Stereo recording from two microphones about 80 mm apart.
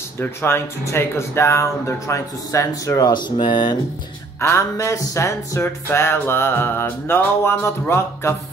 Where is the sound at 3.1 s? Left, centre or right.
Left.